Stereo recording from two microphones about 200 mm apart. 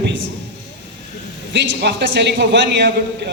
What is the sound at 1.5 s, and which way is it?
A man's voice, 60° right (ahead or behind).